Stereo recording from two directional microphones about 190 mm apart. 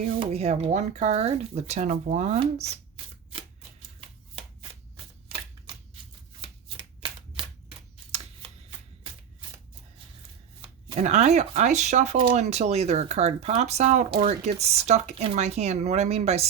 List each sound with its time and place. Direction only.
0.2 s speech: 35° right (ahead or behind)
6.7 s shuffling cards: 25° right (ahead or behind)
10.6 s speech: 35° right (ahead or behind)